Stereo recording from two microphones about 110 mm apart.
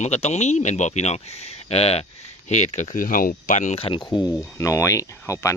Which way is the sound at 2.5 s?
90° left.